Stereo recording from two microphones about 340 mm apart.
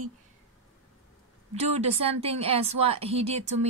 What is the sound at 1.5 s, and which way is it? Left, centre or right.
Speech, centre.